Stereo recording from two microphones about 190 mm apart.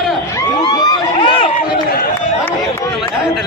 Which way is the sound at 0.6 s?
20° left (ahead or behind).